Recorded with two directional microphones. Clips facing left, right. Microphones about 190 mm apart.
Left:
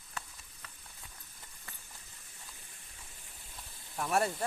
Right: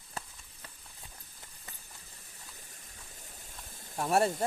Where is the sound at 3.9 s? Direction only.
25° right (ahead or behind).